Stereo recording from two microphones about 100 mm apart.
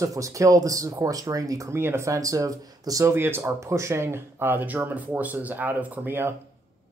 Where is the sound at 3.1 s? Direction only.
25° right (ahead or behind).